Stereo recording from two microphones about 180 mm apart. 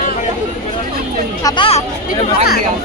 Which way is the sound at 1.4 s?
20° left (ahead or behind).